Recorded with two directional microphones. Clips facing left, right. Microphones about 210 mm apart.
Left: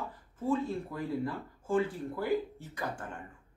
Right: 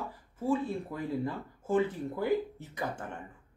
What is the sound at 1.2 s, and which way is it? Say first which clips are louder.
Speech: right 1 dB; 20° right (ahead or behind).